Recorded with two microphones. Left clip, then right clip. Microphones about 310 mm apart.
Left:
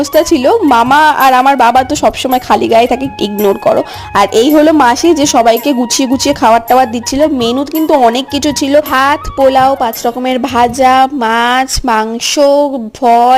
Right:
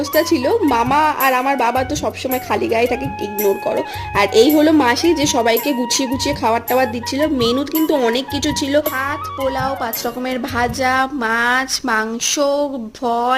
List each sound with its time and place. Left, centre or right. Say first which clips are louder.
0.2 s a woman's voice: left 7 dB; left